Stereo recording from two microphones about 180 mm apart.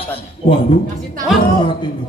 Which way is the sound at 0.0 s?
30° left (ahead or behind).